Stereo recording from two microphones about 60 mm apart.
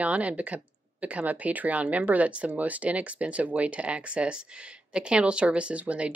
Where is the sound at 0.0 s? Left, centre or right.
Right.